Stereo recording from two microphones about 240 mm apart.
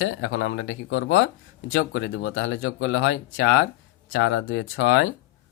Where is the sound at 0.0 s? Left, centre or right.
Left.